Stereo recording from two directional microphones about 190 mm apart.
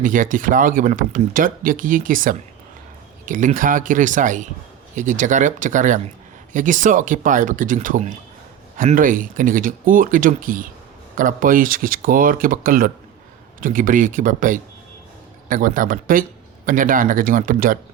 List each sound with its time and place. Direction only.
0.0 s speech: 45° right (ahead or behind)